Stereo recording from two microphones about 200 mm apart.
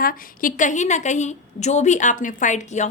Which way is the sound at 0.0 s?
45° left (ahead or behind).